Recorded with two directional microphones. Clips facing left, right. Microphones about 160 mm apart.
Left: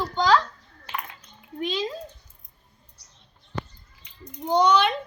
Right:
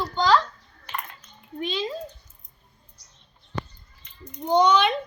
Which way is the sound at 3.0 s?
65° left (ahead or behind).